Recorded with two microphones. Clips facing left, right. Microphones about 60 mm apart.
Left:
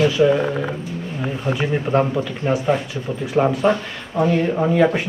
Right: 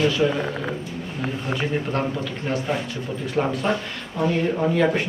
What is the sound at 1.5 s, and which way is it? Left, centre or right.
Speech, centre.